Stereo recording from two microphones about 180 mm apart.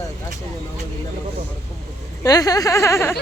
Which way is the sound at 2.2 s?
20° left (ahead or behind).